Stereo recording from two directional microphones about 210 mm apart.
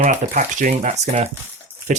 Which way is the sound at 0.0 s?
35° right (ahead or behind).